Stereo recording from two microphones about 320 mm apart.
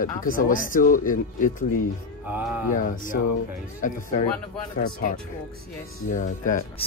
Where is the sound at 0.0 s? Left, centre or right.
Left.